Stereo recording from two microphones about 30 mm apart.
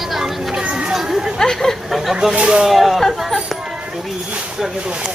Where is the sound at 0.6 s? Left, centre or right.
Right.